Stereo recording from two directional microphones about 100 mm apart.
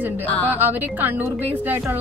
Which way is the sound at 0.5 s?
20° right (ahead or behind).